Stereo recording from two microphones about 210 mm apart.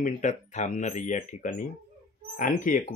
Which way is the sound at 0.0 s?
35° left (ahead or behind).